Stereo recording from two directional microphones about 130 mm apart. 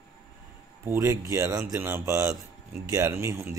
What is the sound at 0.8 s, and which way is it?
A man's voice, 20° right (ahead or behind).